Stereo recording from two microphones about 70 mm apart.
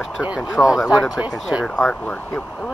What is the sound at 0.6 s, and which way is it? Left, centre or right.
Speech, left.